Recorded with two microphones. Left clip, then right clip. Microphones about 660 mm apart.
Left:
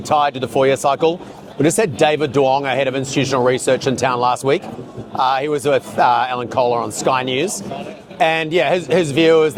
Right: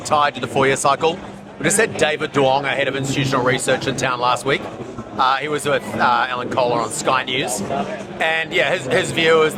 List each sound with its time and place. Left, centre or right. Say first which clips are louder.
0.1 s a man's voice: left 1 dB; left